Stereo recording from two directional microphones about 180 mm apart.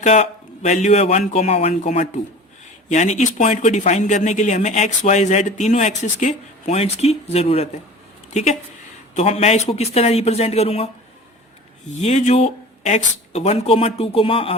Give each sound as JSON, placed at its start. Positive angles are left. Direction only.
{"t": 0.0, "sound": "a woman's voice", "side_deg": 40}
{"t": 12.0, "sound": "speech", "side_deg": 35}